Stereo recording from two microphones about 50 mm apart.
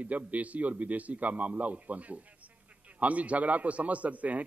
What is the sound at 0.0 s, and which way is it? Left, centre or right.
A man's voice, right.